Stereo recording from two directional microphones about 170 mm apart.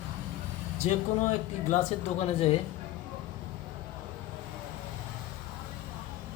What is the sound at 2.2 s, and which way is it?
Speech, 35° left (ahead or behind).